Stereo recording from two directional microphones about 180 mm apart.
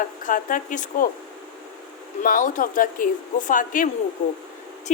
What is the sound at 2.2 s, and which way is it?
Speech, 45° left (ahead or behind).